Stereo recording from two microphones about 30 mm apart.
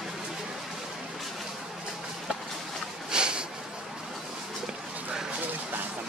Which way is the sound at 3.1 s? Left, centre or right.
Right.